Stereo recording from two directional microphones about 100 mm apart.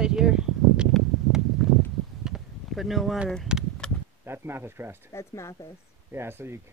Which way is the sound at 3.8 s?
10° left (ahead or behind).